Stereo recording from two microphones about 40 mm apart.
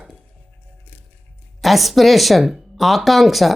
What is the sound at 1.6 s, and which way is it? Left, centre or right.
Speech, centre.